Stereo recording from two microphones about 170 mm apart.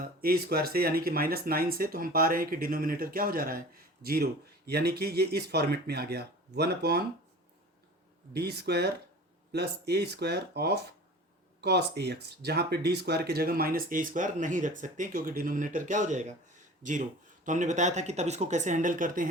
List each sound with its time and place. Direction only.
0.0 s speech: 60° right (ahead or behind)
8.3 s speech: 70° right (ahead or behind); by 19.3 s 50° right (ahead or behind)